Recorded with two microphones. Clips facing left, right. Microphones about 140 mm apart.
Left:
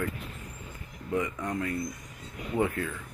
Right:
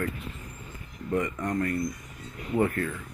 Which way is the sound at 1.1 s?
5° left (ahead or behind).